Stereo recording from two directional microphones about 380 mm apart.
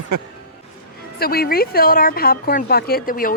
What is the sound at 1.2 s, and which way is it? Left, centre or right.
A woman's voice, left.